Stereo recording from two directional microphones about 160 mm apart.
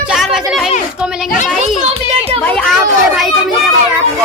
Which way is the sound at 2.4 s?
10° left (ahead or behind).